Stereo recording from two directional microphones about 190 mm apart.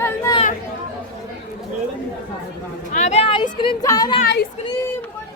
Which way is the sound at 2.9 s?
40° left (ahead or behind).